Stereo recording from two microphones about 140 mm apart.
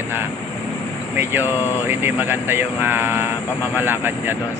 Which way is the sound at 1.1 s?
15° right (ahead or behind).